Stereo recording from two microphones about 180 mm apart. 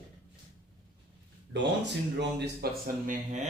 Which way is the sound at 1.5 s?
75° right (ahead or behind).